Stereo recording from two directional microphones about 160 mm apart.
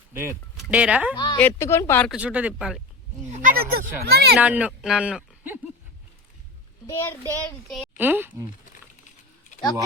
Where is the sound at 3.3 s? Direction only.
55° right (ahead or behind); by 4.4 s 80° right.